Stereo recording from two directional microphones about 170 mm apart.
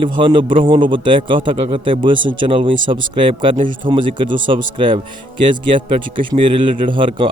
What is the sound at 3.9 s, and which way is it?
A man's voice, 30° right (ahead or behind).